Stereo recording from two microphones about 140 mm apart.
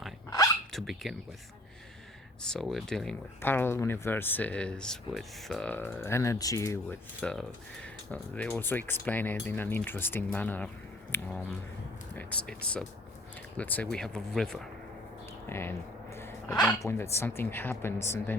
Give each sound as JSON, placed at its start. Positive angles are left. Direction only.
{"t": 0.7, "sound": "speech", "side_deg": 0}
{"t": 2.4, "sound": "speech", "side_deg": 5}
{"t": 3.4, "sound": "speech", "side_deg": 15}
{"t": 7.2, "sound": "speech", "side_deg": 5}
{"t": 15.4, "sound": "speech", "side_deg": 15}
{"t": 16.5, "sound": "speech", "side_deg": 5}
{"t": 16.8, "sound": "speech", "side_deg": 20}